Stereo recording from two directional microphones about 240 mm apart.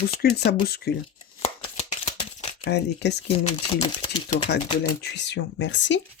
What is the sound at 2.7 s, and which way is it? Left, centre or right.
Speech, left.